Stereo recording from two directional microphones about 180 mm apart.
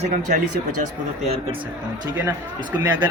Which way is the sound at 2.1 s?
10° right (ahead or behind).